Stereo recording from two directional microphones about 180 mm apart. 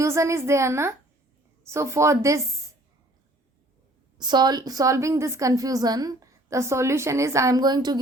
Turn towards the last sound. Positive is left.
turn(degrees=-25)  # may be behind; listen again after turning